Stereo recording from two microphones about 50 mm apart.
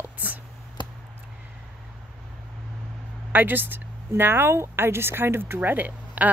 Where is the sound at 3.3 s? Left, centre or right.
Right.